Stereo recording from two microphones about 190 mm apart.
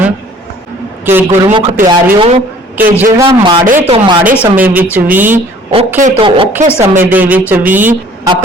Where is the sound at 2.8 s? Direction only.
10° right (ahead or behind).